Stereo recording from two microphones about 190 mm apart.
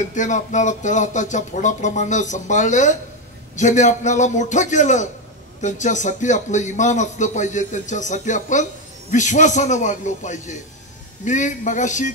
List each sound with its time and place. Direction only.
0.0 s speech: 40° left (ahead or behind)